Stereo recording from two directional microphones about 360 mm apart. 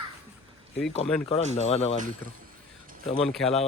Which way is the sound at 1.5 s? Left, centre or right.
Centre.